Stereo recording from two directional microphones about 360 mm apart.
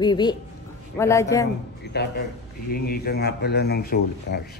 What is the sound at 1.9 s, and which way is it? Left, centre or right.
Speech, left.